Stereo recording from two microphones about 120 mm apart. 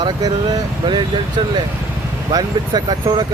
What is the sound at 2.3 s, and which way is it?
Speech, 35° right (ahead or behind).